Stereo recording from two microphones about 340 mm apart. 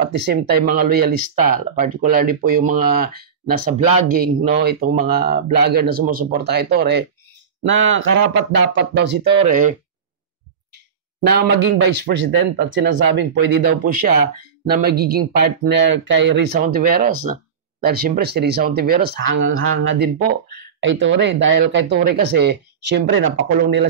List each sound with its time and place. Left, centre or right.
0.1 s speech: right
11.1 s speech: right